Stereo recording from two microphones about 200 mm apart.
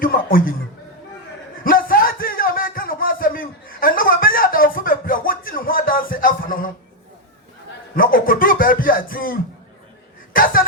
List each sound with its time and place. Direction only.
0.0 s speech: 45° left (ahead or behind)
1.6 s a sound: 45° left (ahead or behind)
7.9 s speech: 45° left (ahead or behind)